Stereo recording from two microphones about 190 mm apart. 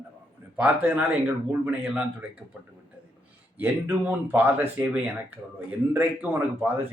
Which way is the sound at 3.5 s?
10° right (ahead or behind).